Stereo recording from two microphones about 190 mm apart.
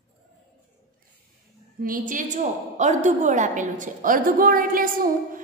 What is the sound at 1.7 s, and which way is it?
A woman's voice, 45° right (ahead or behind).